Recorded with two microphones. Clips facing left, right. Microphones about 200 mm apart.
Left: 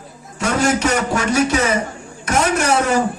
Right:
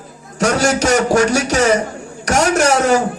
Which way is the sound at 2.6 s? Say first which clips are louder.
Right 4 dB; 80° right.